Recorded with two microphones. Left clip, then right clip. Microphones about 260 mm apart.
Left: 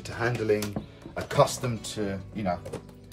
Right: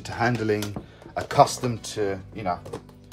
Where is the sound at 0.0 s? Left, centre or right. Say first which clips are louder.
Right 4 dB; right.